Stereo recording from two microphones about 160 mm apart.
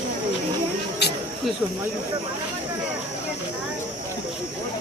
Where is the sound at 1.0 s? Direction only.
90° left.